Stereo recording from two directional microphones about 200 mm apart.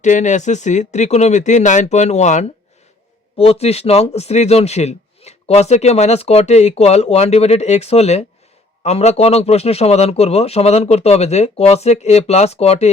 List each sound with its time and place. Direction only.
0.0 s speech: 35° left (ahead or behind)